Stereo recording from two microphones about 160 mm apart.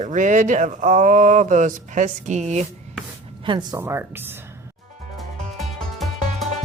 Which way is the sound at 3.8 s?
15° right (ahead or behind).